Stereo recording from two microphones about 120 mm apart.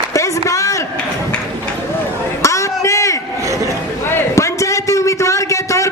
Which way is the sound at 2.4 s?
25° left (ahead or behind).